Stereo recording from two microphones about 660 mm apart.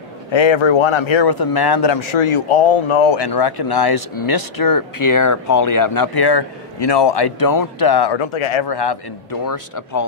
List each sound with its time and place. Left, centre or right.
0.3 s speech: left
3.3 s speech: left